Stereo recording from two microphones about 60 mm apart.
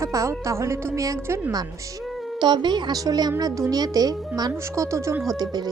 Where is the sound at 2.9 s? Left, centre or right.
Right.